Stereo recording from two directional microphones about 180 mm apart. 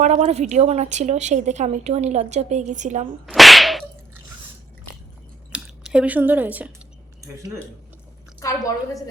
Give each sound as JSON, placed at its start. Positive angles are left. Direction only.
{"t": 0.0, "sound": "a woman's voice", "side_deg": -40}
{"t": 3.2, "sound": "whip", "side_deg": 0}
{"t": 5.5, "sound": "a sound", "side_deg": -5}
{"t": 7.2, "sound": "speech", "side_deg": -15}
{"t": 8.4, "sound": "a woman's voice", "side_deg": 20}